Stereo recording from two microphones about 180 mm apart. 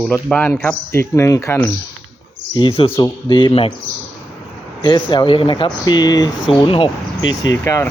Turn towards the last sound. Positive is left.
turn(degrees=15)  # may be behind; listen again after turning